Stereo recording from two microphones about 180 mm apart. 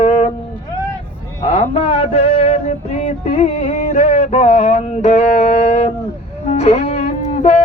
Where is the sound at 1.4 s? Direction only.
35° left (ahead or behind).